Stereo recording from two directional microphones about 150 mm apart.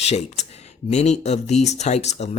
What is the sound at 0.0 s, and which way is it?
Speech, 45° left (ahead or behind).